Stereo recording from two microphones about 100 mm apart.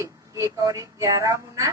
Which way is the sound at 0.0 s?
35° right (ahead or behind).